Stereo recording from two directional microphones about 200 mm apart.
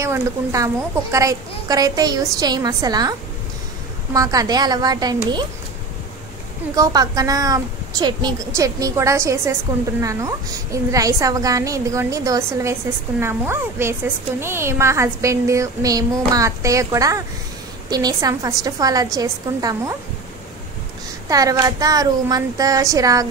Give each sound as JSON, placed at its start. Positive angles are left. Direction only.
{"t": 0.0, "sound": "a woman's voice", "side_deg": -15}
{"t": 6.7, "sound": "a woman's voice", "side_deg": -20}
{"t": 21.3, "sound": "a woman's voice", "side_deg": -15}